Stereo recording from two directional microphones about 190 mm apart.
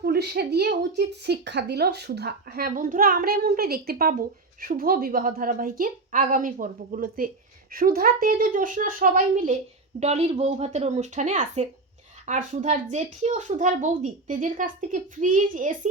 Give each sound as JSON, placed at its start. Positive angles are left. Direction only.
{"t": 0.0, "sound": "a woman's voice", "side_deg": -55}